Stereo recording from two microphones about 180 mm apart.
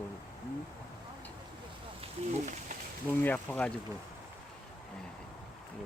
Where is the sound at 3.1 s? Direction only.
10° left (ahead or behind).